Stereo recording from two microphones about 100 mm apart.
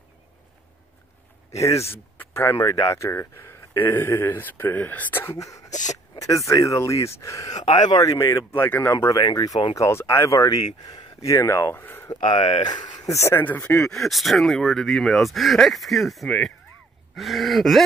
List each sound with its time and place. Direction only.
1.8 s speech: 25° left (ahead or behind)
2.7 s speech: 35° left (ahead or behind); by 5.3 s 20° left (ahead or behind)
6.1 s speech: 35° left (ahead or behind)
7.6 s speech: 50° left (ahead or behind)
9.8 s speech: 30° left (ahead or behind)
12.4 s speech: 90° left
12.6 s speech: 45° left (ahead or behind)
13.1 s speech: 25° left (ahead or behind)
13.8 s speech: centre (ahead or behind)